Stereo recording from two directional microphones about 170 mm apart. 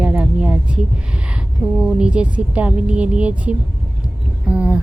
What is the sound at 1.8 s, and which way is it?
A woman's voice, 5° right (ahead or behind).